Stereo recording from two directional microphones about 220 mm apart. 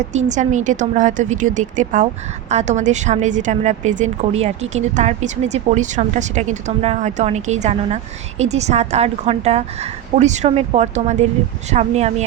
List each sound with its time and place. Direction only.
0.0 s a woman's voice: 30° right (ahead or behind)